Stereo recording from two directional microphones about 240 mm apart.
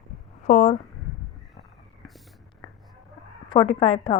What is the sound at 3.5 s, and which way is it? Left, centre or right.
Speech, left.